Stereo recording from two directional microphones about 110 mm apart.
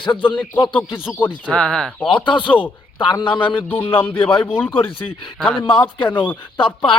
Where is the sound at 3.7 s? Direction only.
15° left (ahead or behind).